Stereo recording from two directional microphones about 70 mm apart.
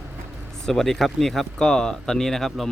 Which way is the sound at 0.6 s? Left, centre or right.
Centre.